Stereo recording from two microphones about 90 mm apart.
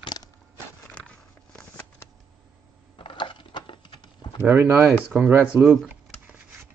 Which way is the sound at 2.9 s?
65° left (ahead or behind).